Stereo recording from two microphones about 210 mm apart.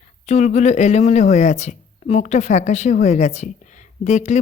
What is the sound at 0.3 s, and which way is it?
Speech, 35° left (ahead or behind).